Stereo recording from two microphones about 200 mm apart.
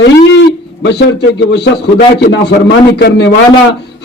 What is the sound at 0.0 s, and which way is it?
A man's voice, 60° left (ahead or behind).